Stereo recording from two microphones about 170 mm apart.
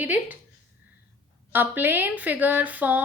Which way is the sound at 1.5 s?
10° right (ahead or behind).